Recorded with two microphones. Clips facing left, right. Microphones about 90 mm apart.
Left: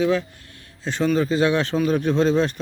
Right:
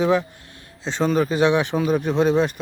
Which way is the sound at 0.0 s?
20° right (ahead or behind).